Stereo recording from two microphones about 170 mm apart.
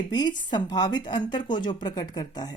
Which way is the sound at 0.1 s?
25° left (ahead or behind).